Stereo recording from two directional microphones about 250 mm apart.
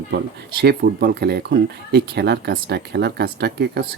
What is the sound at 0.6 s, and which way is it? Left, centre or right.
Speech, right.